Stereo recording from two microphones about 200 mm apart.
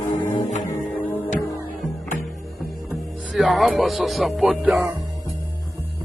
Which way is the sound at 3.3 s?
Centre (ahead or behind).